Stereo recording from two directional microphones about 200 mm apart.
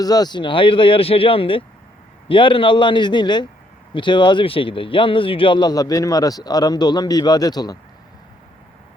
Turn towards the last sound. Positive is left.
turn(degrees=20)  # may be behind; listen again after turning